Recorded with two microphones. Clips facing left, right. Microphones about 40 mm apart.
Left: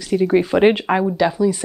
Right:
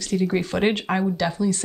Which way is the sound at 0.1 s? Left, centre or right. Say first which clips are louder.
Left 7 dB; centre.